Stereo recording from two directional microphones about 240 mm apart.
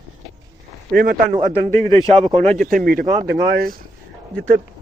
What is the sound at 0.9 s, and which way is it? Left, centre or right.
Speech, right.